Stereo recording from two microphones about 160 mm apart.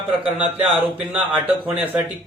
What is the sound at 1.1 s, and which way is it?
Speech, 10° right (ahead or behind).